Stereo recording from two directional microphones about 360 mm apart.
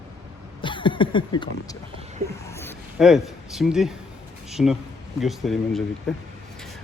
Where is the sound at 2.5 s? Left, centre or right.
Centre.